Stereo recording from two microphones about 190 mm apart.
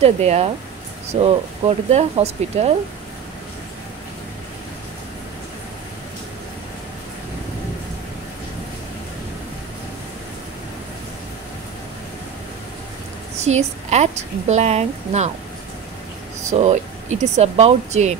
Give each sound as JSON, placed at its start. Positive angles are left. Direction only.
{"t": 0.0, "sound": "a woman's voice", "side_deg": -35}
{"t": 13.4, "sound": "a woman's voice", "side_deg": -35}
{"t": 16.4, "sound": "a woman's voice", "side_deg": -35}